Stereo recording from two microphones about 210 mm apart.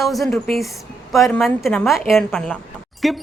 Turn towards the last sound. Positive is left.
turn(degrees=0)  # may be behind; listen again after turning